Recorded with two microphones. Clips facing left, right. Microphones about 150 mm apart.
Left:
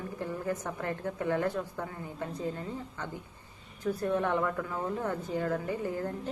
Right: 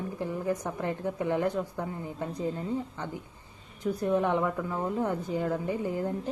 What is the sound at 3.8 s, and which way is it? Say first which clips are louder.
A woman's voice: right 3 dB; 15° right (ahead or behind).